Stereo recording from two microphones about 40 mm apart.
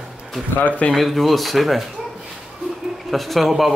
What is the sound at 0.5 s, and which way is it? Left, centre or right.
Speech, left.